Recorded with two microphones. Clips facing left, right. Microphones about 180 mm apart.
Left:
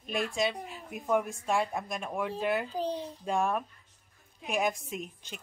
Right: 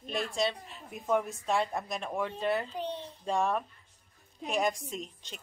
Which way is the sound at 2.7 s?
35° left (ahead or behind).